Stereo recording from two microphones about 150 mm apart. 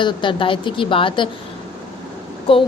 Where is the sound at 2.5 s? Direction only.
35° left (ahead or behind).